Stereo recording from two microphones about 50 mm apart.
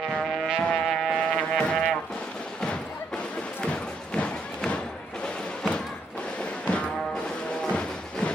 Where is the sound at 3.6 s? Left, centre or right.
Centre.